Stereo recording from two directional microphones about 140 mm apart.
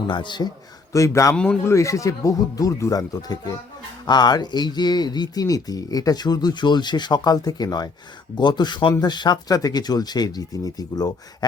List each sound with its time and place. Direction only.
0.1 s a man's voice: 35° left (ahead or behind)
0.9 s speech: 20° left (ahead or behind)